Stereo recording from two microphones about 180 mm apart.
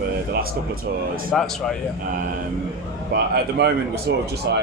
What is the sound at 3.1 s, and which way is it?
Speech, 65° right (ahead or behind).